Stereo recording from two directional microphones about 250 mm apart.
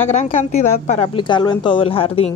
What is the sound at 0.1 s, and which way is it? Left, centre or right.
A woman's voice, left.